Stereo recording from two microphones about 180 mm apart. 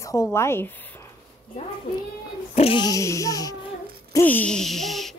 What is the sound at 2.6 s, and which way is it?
A child's voice, 30° left (ahead or behind).